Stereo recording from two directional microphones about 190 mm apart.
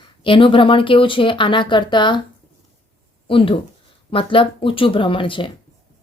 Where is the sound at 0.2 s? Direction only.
25° left (ahead or behind).